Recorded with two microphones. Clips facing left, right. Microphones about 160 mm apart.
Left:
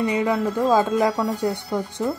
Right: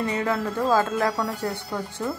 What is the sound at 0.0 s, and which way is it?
Speech, 15° left (ahead or behind).